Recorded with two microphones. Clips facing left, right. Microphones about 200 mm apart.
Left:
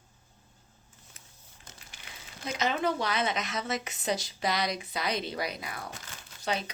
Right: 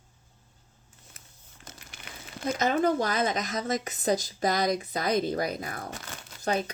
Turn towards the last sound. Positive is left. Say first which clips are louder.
# right 4 dB
turn(degrees=-50)  # may be behind; listen again after turning